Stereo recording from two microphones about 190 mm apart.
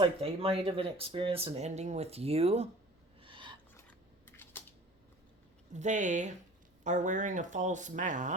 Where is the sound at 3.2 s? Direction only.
25° right (ahead or behind).